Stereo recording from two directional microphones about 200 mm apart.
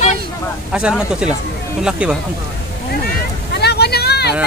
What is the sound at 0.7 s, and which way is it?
A man's voice, 5° right (ahead or behind).